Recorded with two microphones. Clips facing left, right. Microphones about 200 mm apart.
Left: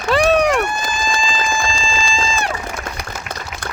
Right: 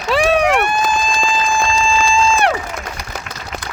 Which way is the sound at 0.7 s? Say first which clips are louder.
Right 5 dB; 60° right (ahead or behind).